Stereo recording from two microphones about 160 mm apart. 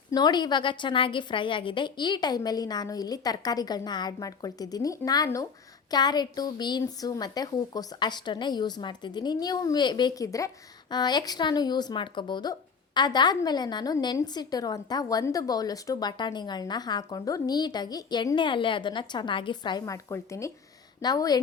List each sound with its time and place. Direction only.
0.1 s a woman's voice: 25° left (ahead or behind)